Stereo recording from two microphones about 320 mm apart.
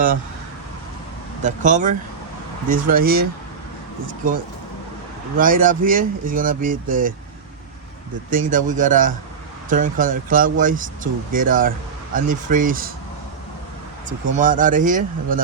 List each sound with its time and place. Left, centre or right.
1.4 s speech: right
5.4 s speech: right
8.3 s speech: right
14.3 s speech: right